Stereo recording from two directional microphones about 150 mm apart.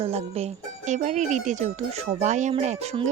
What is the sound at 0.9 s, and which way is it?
Speech, 55° right (ahead or behind).